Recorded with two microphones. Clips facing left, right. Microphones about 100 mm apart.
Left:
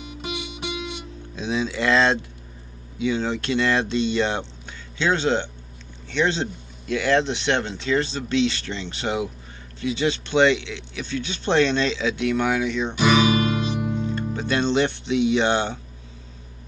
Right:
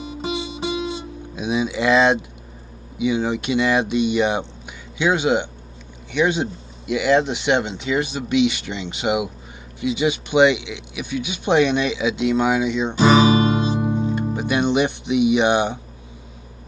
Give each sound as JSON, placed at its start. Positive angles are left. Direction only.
{"t": 0.0, "sound": "music", "side_deg": -30}
{"t": 1.3, "sound": "speech", "side_deg": -15}
{"t": 12.9, "sound": "music", "side_deg": -35}
{"t": 14.3, "sound": "speech", "side_deg": -15}